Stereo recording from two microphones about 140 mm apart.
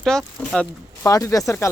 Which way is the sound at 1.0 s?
20° left (ahead or behind).